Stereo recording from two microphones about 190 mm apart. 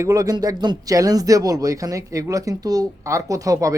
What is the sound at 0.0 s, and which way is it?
Speech, 20° right (ahead or behind).